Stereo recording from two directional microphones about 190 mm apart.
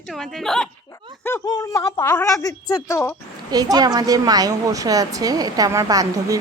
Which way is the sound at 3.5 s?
20° right (ahead or behind).